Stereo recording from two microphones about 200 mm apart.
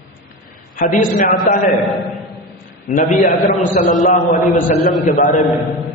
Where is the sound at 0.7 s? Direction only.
40° left (ahead or behind).